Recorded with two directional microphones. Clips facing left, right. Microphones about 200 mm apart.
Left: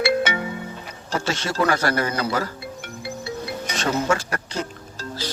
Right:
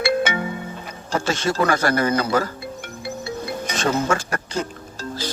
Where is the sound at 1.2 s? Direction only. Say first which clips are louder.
Right 2 dB; 50° right (ahead or behind).